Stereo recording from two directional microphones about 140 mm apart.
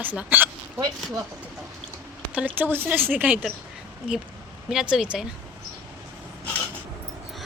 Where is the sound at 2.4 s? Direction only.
15° right (ahead or behind).